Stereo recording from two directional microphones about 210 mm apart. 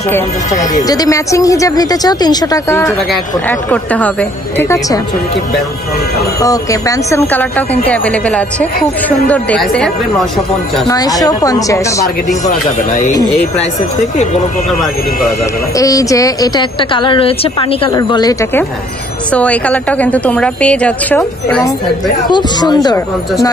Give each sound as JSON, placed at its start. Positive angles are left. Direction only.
{"t": 0.8, "sound": "a woman's voice", "side_deg": 15}
{"t": 6.4, "sound": "a woman's voice", "side_deg": 15}
{"t": 10.9, "sound": "a woman's voice", "side_deg": 15}
{"t": 15.7, "sound": "a woman's voice", "side_deg": 15}
{"t": 22.3, "sound": "speech", "side_deg": 20}